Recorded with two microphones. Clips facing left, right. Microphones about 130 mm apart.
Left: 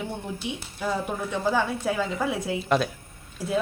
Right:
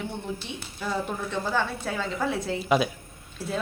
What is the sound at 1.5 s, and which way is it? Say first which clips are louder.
A woman's voice: left 2 dB; 10° left (ahead or behind).